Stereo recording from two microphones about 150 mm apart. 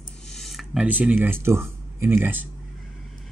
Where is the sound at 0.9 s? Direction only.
10° right (ahead or behind).